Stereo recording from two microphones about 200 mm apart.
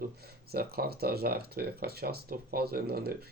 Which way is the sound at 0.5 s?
50° right (ahead or behind).